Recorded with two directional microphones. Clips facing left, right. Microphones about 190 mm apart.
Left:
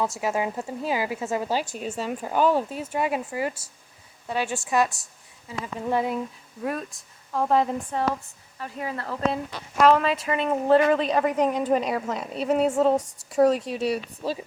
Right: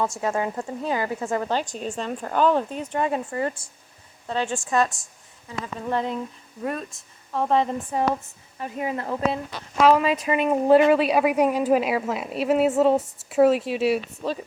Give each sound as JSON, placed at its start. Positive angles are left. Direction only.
{"t": 0.0, "sound": "speech", "side_deg": 5}
{"t": 7.9, "sound": "a woman's voice", "side_deg": -15}
{"t": 9.8, "sound": "a woman's voice", "side_deg": -5}
{"t": 10.1, "sound": "a woman's voice", "side_deg": -15}